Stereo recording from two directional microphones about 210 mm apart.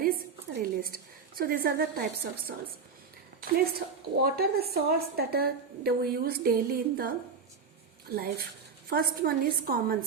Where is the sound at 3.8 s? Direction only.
50° right (ahead or behind).